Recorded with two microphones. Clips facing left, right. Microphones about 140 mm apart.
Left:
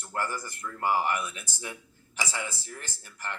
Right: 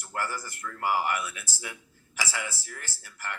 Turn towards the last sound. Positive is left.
turn(degrees=20)  # may be behind; listen again after turning